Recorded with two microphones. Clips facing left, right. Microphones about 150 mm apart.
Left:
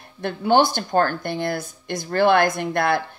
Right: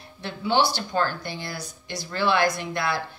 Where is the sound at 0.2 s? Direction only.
50° left (ahead or behind).